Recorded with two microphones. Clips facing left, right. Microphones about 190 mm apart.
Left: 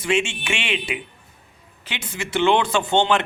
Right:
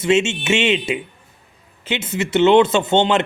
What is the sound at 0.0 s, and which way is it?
Speech, 25° right (ahead or behind).